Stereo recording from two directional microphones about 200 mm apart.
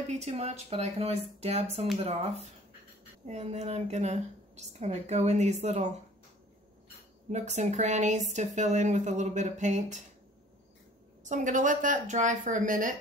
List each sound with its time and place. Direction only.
0.1 s a woman's voice: 35° right (ahead or behind)
3.3 s a woman's voice: 35° right (ahead or behind)
7.2 s a woman's voice: 35° right (ahead or behind)
11.2 s a woman's voice: 40° right (ahead or behind)